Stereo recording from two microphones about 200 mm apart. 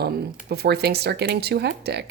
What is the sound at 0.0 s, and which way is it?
Speech, 50° right (ahead or behind).